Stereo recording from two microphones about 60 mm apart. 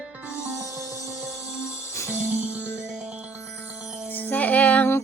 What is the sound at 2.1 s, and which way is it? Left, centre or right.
Music, right.